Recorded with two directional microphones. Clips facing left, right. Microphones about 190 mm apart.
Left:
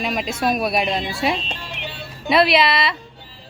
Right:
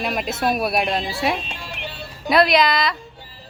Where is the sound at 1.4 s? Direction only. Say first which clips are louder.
Left 1 dB; 10° right (ahead or behind).